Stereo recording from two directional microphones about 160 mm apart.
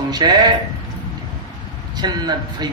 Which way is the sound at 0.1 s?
25° right (ahead or behind).